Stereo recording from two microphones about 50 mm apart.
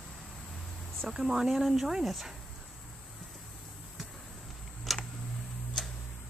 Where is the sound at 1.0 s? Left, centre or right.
Centre.